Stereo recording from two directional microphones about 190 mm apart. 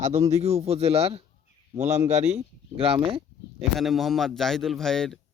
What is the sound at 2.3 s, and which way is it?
Speech, 30° right (ahead or behind).